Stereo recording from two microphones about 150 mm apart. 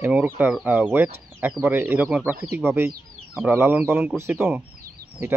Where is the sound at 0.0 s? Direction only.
10° right (ahead or behind).